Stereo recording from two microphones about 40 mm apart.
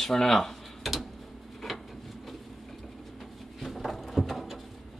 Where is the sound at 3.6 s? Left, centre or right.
Centre.